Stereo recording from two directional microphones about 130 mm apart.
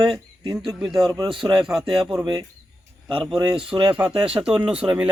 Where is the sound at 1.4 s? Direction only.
40° right (ahead or behind).